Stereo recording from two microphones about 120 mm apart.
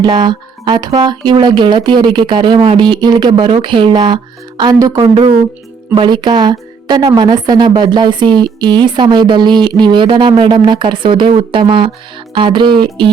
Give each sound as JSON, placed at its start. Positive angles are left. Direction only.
{"t": 0.0, "sound": "a woman's voice", "side_deg": -40}